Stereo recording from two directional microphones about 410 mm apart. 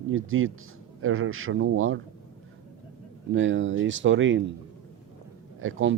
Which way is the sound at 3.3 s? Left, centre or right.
Right.